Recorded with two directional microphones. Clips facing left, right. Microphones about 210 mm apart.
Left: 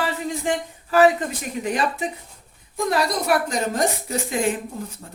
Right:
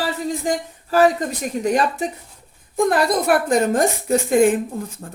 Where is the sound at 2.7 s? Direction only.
55° right (ahead or behind).